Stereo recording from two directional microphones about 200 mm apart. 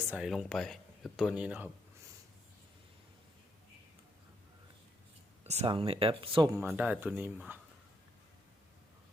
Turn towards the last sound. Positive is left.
turn(degrees=-10)  # may be behind; listen again after turning